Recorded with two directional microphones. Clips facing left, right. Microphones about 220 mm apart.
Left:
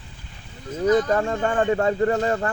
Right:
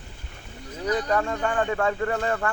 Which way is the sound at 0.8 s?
30° left (ahead or behind).